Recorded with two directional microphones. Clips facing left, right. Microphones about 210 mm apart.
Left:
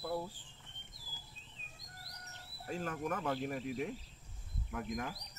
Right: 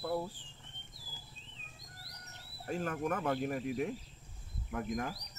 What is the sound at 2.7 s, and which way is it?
Speech, 55° right (ahead or behind).